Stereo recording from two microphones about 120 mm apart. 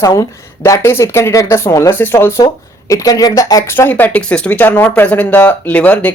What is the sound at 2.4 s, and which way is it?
Speech, 30° left (ahead or behind).